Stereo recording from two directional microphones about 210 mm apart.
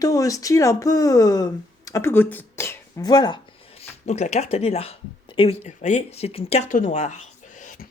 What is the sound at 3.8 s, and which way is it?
Speech, 30° left (ahead or behind).